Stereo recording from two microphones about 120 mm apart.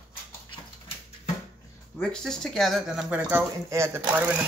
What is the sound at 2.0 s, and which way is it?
Speech, 5° left (ahead or behind).